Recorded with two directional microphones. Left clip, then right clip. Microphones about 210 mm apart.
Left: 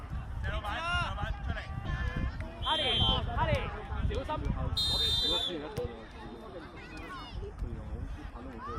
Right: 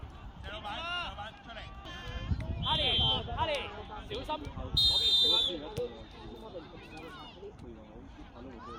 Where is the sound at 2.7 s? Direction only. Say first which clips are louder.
Even; 50° right (ahead or behind).